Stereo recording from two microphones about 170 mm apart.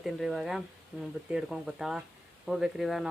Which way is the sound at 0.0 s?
Centre (ahead or behind).